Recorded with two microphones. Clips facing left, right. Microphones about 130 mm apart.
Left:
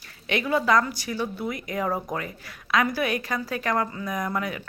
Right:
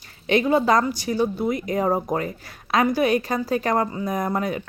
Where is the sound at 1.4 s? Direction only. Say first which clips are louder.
Right 6 dB; 25° right (ahead or behind).